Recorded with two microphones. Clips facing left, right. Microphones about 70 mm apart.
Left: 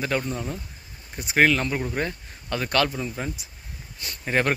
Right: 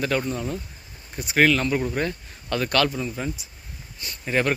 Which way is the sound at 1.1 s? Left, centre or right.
Left.